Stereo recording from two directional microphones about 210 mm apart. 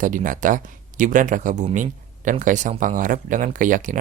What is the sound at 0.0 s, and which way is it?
Speech, 40° right (ahead or behind).